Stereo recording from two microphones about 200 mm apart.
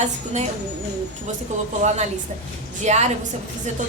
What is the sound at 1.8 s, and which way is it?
A woman's voice, 35° right (ahead or behind).